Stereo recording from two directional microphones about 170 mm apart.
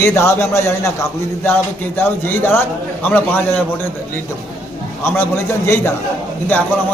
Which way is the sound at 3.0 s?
10° left (ahead or behind).